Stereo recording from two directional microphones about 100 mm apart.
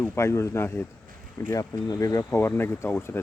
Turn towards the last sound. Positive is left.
turn(degrees=25)  # may be behind; listen again after turning